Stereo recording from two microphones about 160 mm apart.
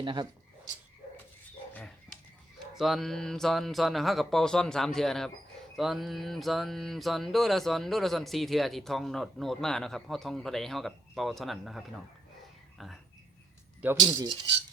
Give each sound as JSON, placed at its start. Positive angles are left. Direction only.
{"t": 0.0, "sound": "speech", "side_deg": -30}
{"t": 1.7, "sound": "a sound", "side_deg": 5}
{"t": 2.7, "sound": "mantra", "side_deg": 0}
{"t": 13.8, "sound": "speech", "side_deg": -10}